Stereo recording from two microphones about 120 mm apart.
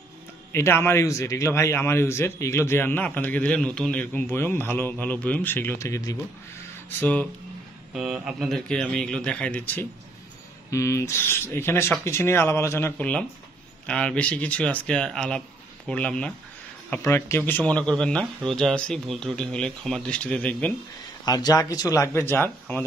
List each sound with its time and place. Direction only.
0.5 s a man's voice: 20° left (ahead or behind)
7.0 s speech: 10° left (ahead or behind)
7.9 s speech: 5° right (ahead or behind); by 9.8 s 10° left (ahead or behind)
10.7 s a man's voice: 25° left (ahead or behind); by 16.3 s 10° left (ahead or behind)
16.9 s speech: 20° left (ahead or behind)
21.3 s a man's voice: 35° left (ahead or behind); by 22.8 s 15° left (ahead or behind)